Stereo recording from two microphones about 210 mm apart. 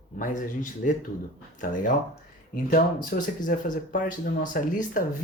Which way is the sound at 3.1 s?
45° left (ahead or behind).